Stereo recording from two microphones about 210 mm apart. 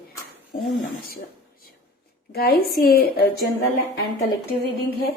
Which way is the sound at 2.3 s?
45° left (ahead or behind).